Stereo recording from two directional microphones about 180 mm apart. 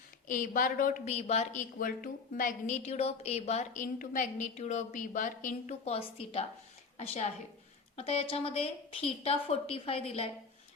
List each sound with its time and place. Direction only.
0.3 s a woman's voice: 50° left (ahead or behind)
1.8 s a woman's voice: 50° left (ahead or behind); by 10.2 s 35° left (ahead or behind)